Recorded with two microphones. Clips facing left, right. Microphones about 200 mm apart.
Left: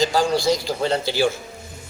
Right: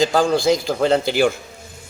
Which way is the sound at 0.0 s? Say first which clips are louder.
Right 3 dB; 50° right (ahead or behind).